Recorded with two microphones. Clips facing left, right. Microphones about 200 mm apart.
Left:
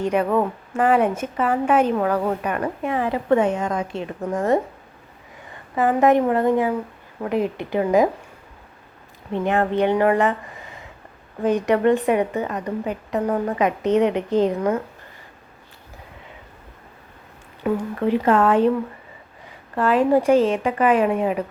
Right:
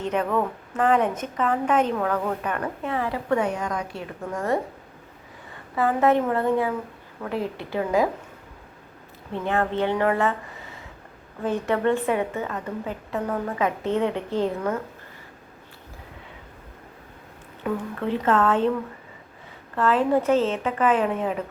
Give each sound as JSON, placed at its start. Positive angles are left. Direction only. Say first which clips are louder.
{"t": 0.0, "sound": "a woman's voice", "louder": "left 4 dB", "side_deg": 10}
{"t": 5.7, "sound": "a woman's voice", "louder": "left 4 dB", "side_deg": 15}
{"t": 9.3, "sound": "a woman's voice", "louder": "left 4 dB", "side_deg": 15}
{"t": 17.6, "sound": "a woman's voice", "louder": "left 5 dB", "side_deg": 10}
{"t": 19.7, "sound": "a woman's voice", "louder": "left 3 dB", "side_deg": 10}